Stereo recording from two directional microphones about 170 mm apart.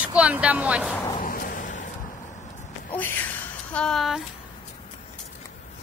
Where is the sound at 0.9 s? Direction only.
20° left (ahead or behind).